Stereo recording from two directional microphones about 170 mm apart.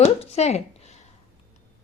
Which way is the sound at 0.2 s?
40° left (ahead or behind).